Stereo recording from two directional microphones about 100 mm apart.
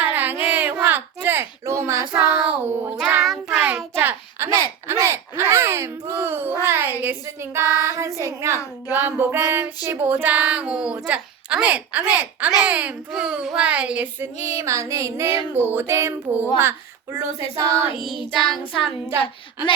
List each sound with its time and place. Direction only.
0.0 s a sound: 20° right (ahead or behind)
2.3 s speech: 15° right (ahead or behind)
3.2 s child singing: centre (ahead or behind)
4.0 s a child's voice: 25° right (ahead or behind)
14.3 s female singing: 90° left
14.6 s child singing: 30° right (ahead or behind)
15.5 s a child's voice: 20° right (ahead or behind)
18.6 s child singing: 65° left (ahead or behind)